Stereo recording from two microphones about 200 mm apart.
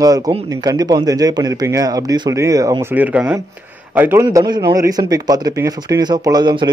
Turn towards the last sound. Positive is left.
turn(degrees=-20)  # may be behind; listen again after turning